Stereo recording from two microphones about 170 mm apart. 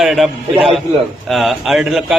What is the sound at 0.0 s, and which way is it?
Speech, centre (ahead or behind).